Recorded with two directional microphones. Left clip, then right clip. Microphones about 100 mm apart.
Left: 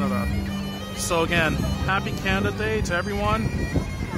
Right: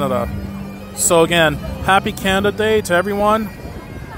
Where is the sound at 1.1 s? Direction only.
70° right (ahead or behind).